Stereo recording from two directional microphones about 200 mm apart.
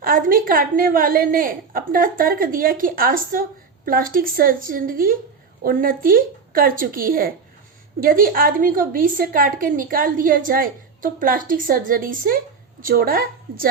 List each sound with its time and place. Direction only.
0.0 s a woman's voice: 45° right (ahead or behind)